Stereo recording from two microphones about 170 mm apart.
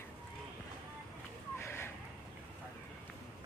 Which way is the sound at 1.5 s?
15° left (ahead or behind).